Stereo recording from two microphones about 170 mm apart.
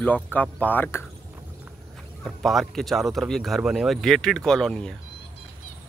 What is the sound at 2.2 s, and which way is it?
Speech, centre (ahead or behind).